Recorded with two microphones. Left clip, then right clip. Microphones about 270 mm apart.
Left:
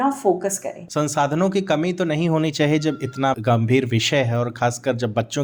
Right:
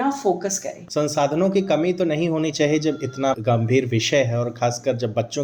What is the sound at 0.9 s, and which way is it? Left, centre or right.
Speech, left.